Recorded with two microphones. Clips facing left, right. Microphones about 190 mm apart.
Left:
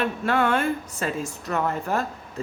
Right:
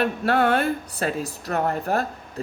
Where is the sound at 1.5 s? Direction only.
60° right (ahead or behind).